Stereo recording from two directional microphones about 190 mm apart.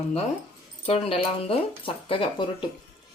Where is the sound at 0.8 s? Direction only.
30° left (ahead or behind).